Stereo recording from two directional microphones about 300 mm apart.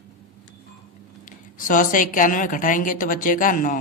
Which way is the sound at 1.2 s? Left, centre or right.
Left.